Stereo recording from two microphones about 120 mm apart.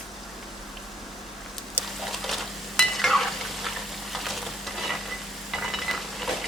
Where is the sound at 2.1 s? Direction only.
Centre (ahead or behind).